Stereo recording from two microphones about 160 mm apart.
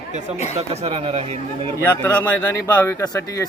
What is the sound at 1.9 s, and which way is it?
Speech, 10° left (ahead or behind).